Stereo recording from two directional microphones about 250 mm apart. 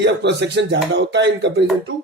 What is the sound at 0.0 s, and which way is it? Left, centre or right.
Speech, right.